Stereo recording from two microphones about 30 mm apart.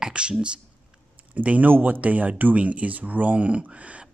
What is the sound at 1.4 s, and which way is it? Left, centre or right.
Speech, right.